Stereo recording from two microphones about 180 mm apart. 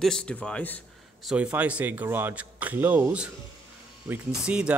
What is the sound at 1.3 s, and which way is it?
Speech, 5° right (ahead or behind).